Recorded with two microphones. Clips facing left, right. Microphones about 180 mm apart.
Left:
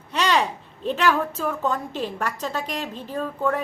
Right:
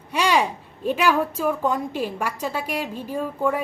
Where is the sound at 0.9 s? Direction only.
10° right (ahead or behind).